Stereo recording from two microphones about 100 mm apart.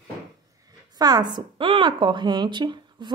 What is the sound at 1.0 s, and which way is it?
Speech, 40° right (ahead or behind).